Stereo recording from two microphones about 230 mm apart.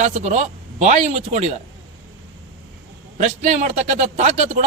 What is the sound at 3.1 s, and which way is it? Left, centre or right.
A man's voice, right.